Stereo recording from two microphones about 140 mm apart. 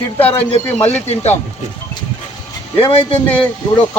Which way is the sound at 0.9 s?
50° left (ahead or behind).